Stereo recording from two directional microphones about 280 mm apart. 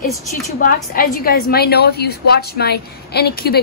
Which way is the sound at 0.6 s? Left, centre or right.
Left.